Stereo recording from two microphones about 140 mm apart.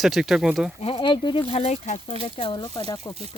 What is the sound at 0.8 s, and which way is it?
Speech, 35° left (ahead or behind).